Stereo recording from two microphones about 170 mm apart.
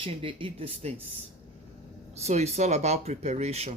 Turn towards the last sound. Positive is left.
turn(degrees=-40)  # may be behind; listen again after turning